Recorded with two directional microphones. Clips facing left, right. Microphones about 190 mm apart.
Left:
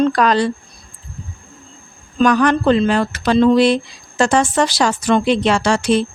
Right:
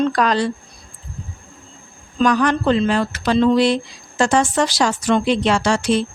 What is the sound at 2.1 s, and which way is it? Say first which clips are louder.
Speech: left 3 dB; 60° left (ahead or behind).